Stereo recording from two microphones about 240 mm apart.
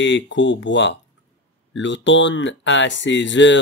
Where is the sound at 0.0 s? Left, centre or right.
Left.